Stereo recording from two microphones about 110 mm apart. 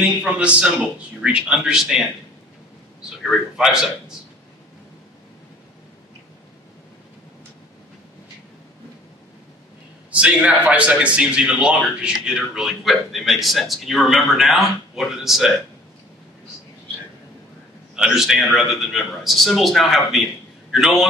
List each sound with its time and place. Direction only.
0.0 s a man's voice: 10° right (ahead or behind)
3.2 s a man's voice: centre (ahead or behind)
10.1 s a man's voice: 10° right (ahead or behind)
17.9 s a man's voice: 5° right (ahead or behind)